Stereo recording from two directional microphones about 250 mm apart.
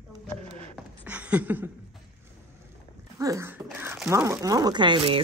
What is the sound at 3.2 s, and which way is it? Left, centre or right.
Speech, centre.